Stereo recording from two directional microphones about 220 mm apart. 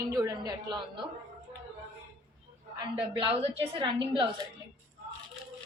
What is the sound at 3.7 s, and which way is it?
Speech, 20° right (ahead or behind).